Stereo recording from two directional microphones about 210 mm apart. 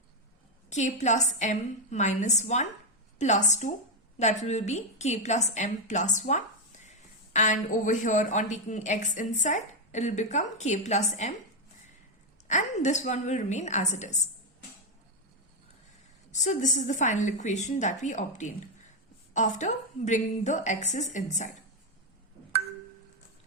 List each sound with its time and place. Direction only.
0.7 s a woman's voice: 35° left (ahead or behind)
12.5 s a woman's voice: 35° left (ahead or behind)
16.3 s a woman's voice: 35° left (ahead or behind)